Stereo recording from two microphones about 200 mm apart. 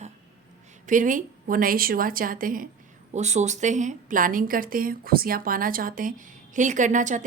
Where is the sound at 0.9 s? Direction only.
40° right (ahead or behind).